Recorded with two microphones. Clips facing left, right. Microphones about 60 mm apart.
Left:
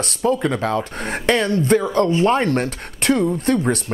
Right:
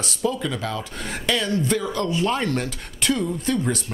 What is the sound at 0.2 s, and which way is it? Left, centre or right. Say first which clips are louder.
Speech: left 6 dB; left.